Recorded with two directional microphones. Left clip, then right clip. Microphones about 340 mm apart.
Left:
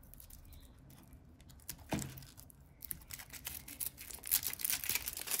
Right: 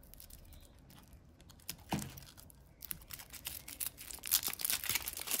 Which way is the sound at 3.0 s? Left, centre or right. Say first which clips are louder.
Left 1 dB; centre.